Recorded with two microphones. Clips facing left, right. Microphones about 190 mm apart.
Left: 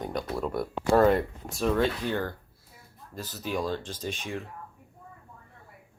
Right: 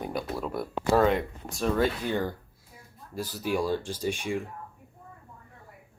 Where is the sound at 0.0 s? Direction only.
5° right (ahead or behind).